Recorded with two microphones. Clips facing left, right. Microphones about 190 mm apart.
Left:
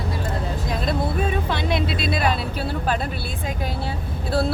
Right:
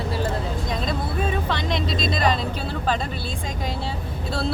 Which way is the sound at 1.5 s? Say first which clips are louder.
Left 2 dB; 10° left (ahead or behind).